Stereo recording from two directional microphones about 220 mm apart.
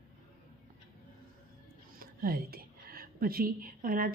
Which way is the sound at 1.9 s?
40° right (ahead or behind).